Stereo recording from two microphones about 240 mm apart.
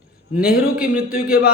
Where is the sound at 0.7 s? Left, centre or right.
Centre.